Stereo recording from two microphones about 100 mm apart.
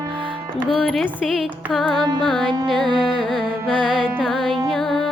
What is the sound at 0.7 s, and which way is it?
Carnatic music, centre (ahead or behind).